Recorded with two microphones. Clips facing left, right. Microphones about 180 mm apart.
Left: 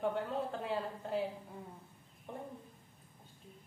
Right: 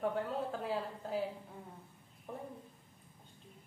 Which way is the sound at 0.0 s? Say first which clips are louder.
Even; centre (ahead or behind).